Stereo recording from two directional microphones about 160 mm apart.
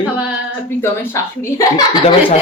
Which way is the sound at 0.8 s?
20° left (ahead or behind).